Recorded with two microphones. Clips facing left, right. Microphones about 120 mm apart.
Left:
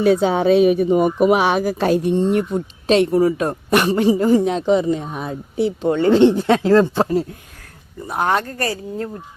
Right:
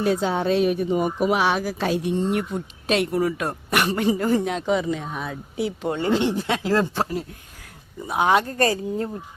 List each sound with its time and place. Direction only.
0.0 s speech: 65° left (ahead or behind); by 2.1 s 45° left (ahead or behind)
2.8 s a man's voice: 30° left (ahead or behind)
8.0 s speech: centre (ahead or behind)
8.4 s a woman's voice: 25° right (ahead or behind)